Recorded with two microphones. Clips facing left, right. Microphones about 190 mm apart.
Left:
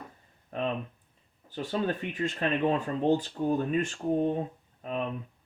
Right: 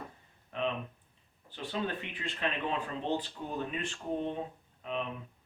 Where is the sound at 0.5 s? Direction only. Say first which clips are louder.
Left 2 dB; 45° left (ahead or behind).